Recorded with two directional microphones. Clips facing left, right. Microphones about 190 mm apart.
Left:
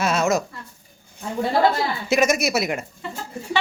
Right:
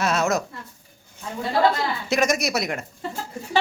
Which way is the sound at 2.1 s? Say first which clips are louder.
Left 3 dB; centre (ahead or behind).